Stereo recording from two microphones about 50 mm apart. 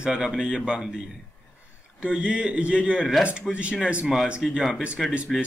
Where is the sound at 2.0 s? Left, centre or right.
Right; by 4.8 s centre.